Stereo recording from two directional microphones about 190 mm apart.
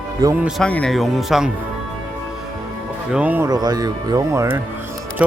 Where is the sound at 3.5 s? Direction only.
20° right (ahead or behind).